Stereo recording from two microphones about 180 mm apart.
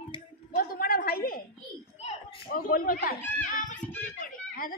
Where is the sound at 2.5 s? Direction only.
50° left (ahead or behind).